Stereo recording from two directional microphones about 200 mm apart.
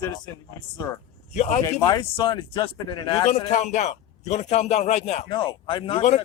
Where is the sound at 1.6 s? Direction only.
15° left (ahead or behind).